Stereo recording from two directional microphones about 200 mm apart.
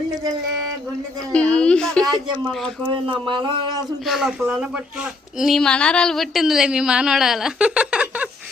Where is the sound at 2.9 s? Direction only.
25° right (ahead or behind).